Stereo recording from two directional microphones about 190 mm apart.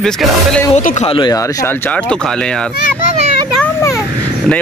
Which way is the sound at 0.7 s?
40° left (ahead or behind).